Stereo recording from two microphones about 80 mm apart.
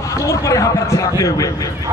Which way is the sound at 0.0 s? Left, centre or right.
Left.